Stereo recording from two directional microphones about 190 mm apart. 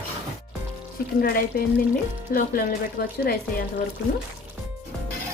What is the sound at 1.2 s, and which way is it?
Speech, 50° left (ahead or behind).